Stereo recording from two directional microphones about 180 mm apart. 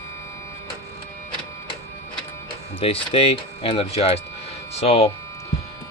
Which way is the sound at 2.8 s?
30° left (ahead or behind).